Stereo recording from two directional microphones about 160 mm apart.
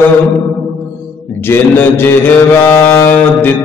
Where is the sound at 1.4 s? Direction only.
15° left (ahead or behind).